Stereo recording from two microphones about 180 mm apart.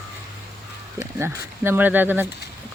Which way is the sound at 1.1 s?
10° right (ahead or behind).